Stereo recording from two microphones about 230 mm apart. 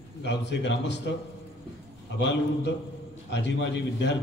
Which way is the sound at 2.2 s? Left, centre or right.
Left.